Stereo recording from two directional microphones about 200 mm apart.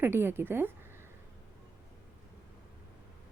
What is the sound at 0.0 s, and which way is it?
Speech, 10° right (ahead or behind).